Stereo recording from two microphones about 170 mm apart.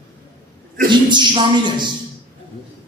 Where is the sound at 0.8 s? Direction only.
25° right (ahead or behind).